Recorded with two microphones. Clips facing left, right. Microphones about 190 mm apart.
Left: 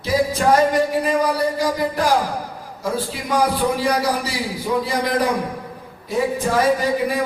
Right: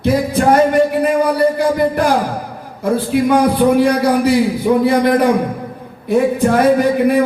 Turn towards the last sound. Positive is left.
turn(degrees=-60)  # may be behind; listen again after turning